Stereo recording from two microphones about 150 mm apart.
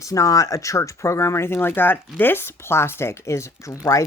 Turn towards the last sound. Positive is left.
turn(degrees=20)  # may be behind; listen again after turning